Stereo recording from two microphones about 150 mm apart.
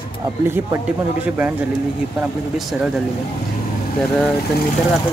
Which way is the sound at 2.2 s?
Centre (ahead or behind).